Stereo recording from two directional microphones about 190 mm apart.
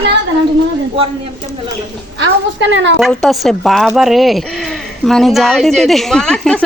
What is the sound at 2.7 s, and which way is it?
Speech, 70° right (ahead or behind).